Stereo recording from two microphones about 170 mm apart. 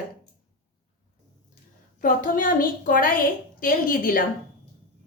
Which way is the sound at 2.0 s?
55° left (ahead or behind).